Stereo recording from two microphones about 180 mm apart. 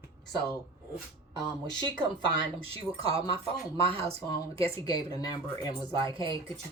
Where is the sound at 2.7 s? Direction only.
30° right (ahead or behind).